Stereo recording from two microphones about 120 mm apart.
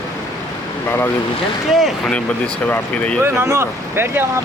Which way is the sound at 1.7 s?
Centre (ahead or behind).